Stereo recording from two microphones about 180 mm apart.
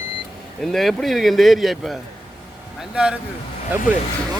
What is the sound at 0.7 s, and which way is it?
Speech, centre (ahead or behind).